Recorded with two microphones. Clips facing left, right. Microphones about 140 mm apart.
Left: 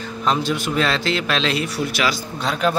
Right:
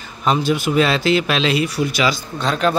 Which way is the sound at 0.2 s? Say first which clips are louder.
Right 3 dB; 5° right (ahead or behind).